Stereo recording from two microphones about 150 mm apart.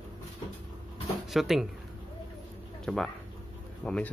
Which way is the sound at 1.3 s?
Centre (ahead or behind).